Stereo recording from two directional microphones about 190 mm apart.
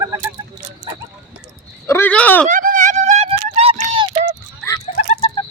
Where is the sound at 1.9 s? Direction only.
10° left (ahead or behind).